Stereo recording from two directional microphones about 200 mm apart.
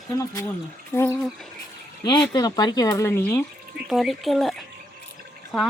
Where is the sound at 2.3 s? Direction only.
20° left (ahead or behind).